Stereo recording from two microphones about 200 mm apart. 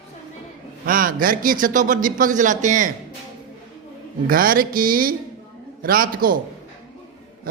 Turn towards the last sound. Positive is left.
turn(degrees=-45)  # may be behind; listen again after turning